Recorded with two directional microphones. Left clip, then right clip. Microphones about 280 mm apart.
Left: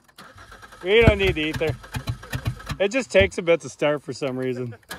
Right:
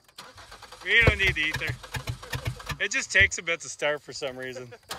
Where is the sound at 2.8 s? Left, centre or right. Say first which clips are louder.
Left 3 dB; centre.